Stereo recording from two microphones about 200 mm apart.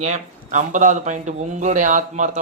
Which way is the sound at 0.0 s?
35° right (ahead or behind).